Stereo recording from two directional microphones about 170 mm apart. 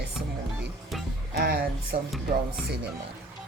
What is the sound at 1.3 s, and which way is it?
Speech, 60° right (ahead or behind).